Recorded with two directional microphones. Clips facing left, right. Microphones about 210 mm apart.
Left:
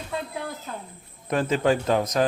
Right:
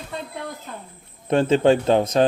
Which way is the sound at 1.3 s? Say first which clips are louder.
Right 6 dB; 25° right (ahead or behind).